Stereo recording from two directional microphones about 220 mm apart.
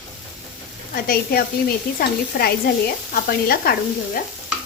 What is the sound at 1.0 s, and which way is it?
Speech, 45° left (ahead or behind).